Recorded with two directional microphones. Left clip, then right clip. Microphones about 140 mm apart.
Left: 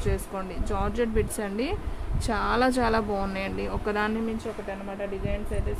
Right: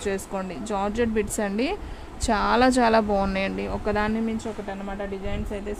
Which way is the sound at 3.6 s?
30° right (ahead or behind).